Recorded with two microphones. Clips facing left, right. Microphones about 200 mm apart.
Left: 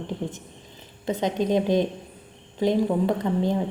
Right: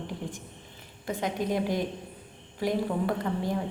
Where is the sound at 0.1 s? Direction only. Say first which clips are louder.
Left 6 dB; 25° left (ahead or behind).